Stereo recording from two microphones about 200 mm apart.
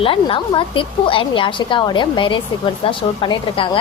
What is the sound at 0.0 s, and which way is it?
A woman's voice, 25° left (ahead or behind).